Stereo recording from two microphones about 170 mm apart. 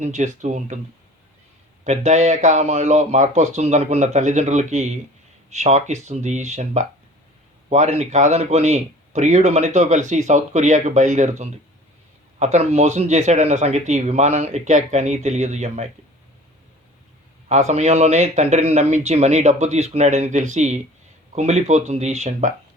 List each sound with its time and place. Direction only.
0.0 s speech: 45° right (ahead or behind)
1.8 s speech: 45° right (ahead or behind)
17.5 s speech: 40° right (ahead or behind)